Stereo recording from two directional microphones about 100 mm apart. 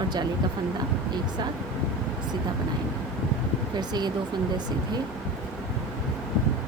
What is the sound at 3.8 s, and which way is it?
Speech, 45° right (ahead or behind).